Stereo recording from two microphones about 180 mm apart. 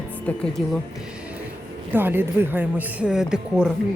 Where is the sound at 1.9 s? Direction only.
10° right (ahead or behind).